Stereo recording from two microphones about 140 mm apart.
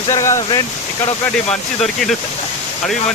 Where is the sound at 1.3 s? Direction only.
5° left (ahead or behind).